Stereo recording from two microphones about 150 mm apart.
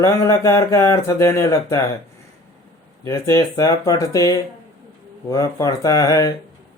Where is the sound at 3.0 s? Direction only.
20° left (ahead or behind).